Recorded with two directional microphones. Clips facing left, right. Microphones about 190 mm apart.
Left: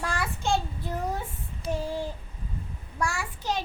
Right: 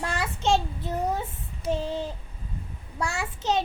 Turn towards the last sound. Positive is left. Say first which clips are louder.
# right 4 dB
turn(degrees=-25)  # may be behind; listen again after turning